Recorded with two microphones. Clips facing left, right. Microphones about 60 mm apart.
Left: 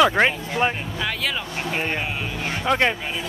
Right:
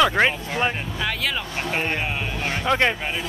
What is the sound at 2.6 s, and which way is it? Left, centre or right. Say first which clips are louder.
Speech: even; centre.